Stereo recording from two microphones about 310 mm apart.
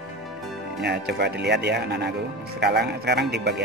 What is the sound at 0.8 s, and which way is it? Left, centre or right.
Speech, right.